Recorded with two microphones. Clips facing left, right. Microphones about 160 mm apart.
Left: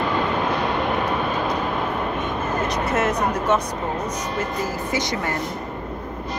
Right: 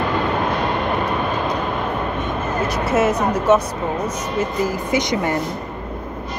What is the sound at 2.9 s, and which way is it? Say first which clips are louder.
Speech: right 6 dB; 5° right (ahead or behind).